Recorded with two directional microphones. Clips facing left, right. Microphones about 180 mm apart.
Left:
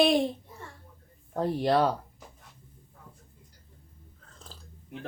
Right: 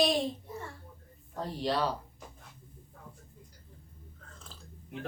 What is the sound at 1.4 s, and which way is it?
Speech, 55° left (ahead or behind).